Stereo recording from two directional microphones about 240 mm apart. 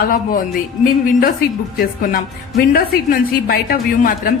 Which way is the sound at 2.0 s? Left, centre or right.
Left.